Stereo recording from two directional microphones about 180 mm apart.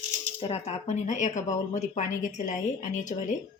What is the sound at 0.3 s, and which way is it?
A woman's voice, 35° left (ahead or behind).